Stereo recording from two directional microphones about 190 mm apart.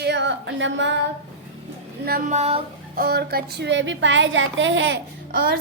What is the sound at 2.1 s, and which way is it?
Female singing, 45° right (ahead or behind).